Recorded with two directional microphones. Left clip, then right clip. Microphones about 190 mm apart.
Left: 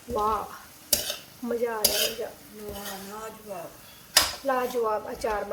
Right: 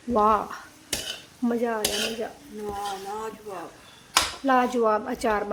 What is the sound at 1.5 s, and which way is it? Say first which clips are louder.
Speech: right 2 dB; 30° right (ahead or behind).